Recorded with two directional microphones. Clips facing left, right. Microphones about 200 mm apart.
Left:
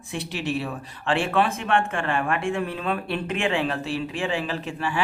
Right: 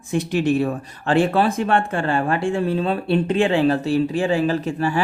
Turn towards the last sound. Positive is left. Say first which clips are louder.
# right 7 dB
turn(degrees=-40)  # may be behind; listen again after turning